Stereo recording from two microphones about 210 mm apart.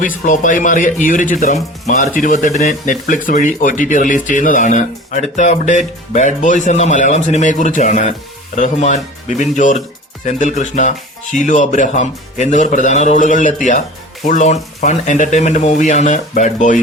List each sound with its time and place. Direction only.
0.3 s speech: 40° left (ahead or behind)